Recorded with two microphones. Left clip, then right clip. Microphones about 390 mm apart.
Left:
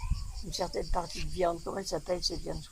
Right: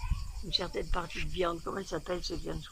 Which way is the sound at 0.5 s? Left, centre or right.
Centre.